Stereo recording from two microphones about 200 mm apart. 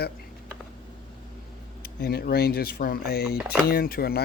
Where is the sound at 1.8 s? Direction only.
50° left (ahead or behind).